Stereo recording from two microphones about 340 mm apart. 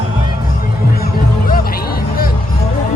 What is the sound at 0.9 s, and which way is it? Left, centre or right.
Music, left.